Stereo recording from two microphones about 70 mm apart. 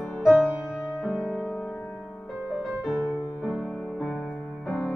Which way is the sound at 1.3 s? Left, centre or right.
Left.